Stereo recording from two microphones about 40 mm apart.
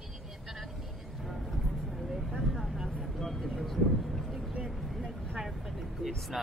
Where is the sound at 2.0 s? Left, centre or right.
Centre.